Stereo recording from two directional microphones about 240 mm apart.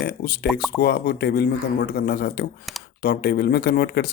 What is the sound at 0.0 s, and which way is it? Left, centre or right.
Speech, left.